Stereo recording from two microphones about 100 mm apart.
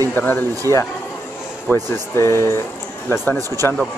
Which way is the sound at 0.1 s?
20° left (ahead or behind).